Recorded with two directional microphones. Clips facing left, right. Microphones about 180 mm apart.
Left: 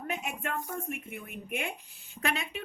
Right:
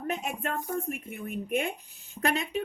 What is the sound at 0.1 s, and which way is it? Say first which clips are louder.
A woman's voice: right 3 dB; 40° right (ahead or behind).